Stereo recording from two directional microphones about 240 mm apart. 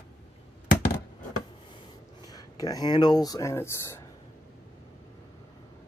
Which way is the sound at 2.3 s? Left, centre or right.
Centre.